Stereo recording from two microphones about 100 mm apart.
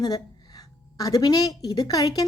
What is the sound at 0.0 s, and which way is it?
A woman's voice, 40° left (ahead or behind).